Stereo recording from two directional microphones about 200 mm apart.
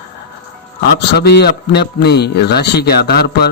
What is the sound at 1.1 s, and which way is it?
A man's voice, 55° left (ahead or behind).